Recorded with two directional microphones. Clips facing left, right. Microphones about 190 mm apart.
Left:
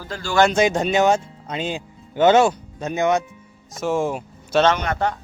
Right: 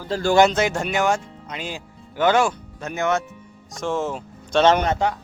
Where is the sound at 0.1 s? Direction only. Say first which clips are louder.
Right 8 dB; 35° right (ahead or behind).